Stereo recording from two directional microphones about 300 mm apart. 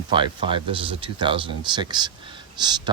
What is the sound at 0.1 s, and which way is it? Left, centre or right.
Speech, centre.